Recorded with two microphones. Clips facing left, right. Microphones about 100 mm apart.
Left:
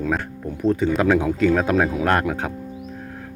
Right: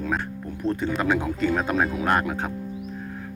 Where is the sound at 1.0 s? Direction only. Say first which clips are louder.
Left 5 dB; 90° left.